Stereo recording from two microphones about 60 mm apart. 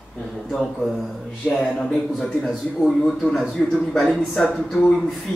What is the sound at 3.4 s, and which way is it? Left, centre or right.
Speech, centre.